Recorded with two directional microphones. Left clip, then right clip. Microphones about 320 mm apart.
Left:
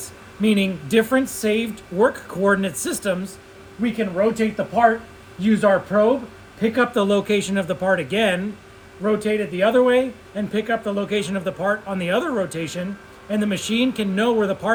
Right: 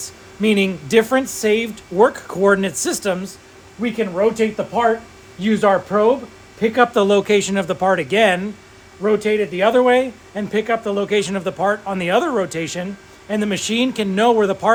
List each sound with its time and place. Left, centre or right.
0.0 s speech: right